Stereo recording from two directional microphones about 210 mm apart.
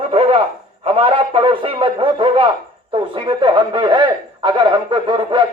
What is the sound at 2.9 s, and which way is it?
A man's voice, 25° right (ahead or behind).